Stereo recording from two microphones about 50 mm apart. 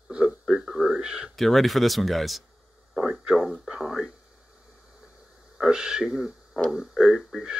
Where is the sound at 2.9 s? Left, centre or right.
Centre.